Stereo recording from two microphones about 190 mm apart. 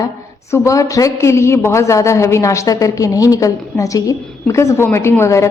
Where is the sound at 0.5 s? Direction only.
15° left (ahead or behind).